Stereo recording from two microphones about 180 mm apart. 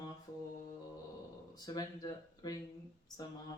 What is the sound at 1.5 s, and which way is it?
Speech, 20° left (ahead or behind).